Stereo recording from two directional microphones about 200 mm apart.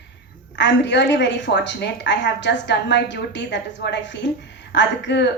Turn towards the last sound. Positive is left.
turn(degrees=60)  # may be behind; listen again after turning